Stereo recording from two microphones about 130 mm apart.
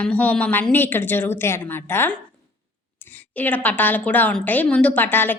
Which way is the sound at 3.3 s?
15° left (ahead or behind).